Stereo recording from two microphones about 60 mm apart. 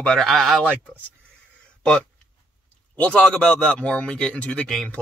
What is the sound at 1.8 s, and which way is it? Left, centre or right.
Speech, centre.